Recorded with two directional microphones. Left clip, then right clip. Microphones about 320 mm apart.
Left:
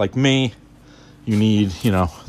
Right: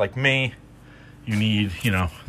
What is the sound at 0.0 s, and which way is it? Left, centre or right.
Speech, left.